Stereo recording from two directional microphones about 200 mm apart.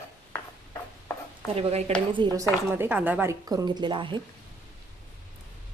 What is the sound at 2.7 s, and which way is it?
A woman's voice, 10° right (ahead or behind).